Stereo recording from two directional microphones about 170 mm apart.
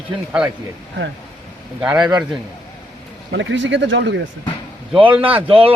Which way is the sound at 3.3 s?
90° right.